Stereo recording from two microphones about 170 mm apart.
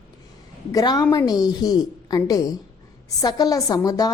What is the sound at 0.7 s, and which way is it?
A woman's voice, 20° left (ahead or behind).